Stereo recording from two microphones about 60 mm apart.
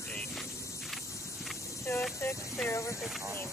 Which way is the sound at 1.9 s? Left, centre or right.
Left.